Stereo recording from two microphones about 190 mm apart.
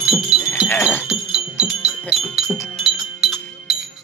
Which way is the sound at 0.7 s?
10° left (ahead or behind).